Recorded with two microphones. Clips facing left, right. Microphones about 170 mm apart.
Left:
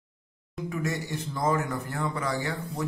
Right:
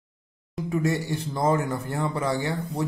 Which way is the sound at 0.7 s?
30° right (ahead or behind).